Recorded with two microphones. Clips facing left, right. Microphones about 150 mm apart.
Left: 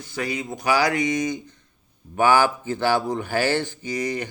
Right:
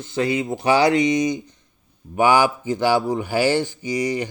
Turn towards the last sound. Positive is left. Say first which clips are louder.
# right 4 dB
turn(degrees=-10)  # may be behind; listen again after turning